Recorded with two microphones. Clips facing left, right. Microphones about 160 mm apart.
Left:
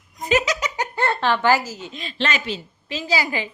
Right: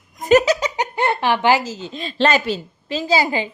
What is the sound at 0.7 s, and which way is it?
Speech, 15° right (ahead or behind).